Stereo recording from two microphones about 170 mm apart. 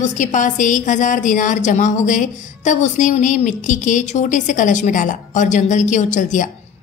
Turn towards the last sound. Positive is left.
turn(degrees=50)  # may be behind; listen again after turning